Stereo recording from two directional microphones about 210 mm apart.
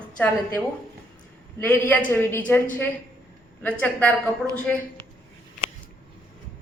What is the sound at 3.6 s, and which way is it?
A woman's voice, 5° left (ahead or behind).